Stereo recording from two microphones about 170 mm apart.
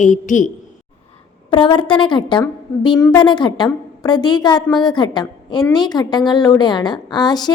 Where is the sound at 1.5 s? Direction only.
30° left (ahead or behind).